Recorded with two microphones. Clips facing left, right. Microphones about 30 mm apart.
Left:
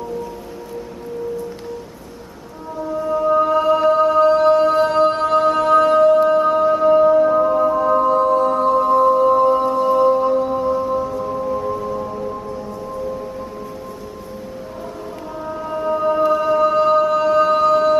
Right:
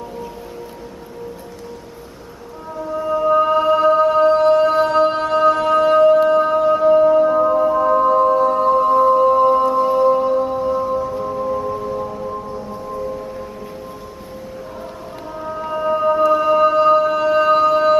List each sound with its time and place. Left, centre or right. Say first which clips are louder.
3.1 s music: right 1 dB; centre
15.6 s music: right 2 dB; centre